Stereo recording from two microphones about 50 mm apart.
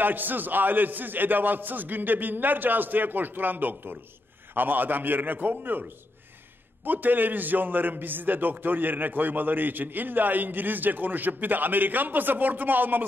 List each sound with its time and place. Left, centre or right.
0.0 s a man's voice: right